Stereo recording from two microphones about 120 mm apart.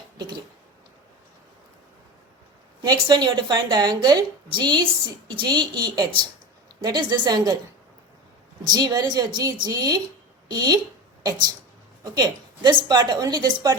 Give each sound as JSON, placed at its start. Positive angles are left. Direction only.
{"t": 2.8, "sound": "a woman's voice", "side_deg": -35}
{"t": 8.6, "sound": "a woman's voice", "side_deg": -35}